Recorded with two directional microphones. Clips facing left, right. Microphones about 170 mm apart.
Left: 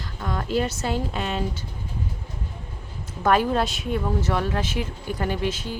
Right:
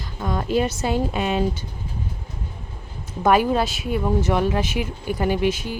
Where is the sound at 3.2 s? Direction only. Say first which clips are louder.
Right 3 dB; 10° right (ahead or behind).